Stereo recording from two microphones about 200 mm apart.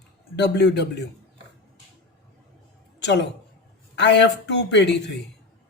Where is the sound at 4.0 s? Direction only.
60° left (ahead or behind).